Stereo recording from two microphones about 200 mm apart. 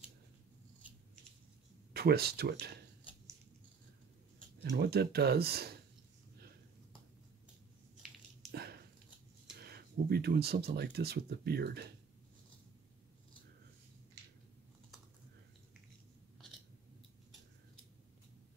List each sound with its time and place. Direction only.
2.0 s speech: 50° right (ahead or behind)
4.7 s speech: 50° right (ahead or behind)
8.5 s biting: 50° right (ahead or behind)
9.6 s speech: 50° right (ahead or behind)